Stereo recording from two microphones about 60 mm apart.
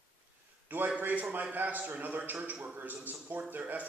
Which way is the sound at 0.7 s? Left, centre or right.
Right.